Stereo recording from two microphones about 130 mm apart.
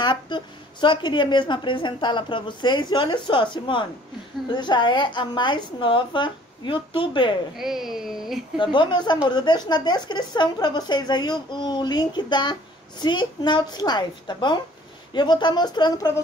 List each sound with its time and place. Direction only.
0.0 s a woman's voice: 35° left (ahead or behind)
7.5 s speech: 5° right (ahead or behind)
8.5 s a woman's voice: 35° left (ahead or behind)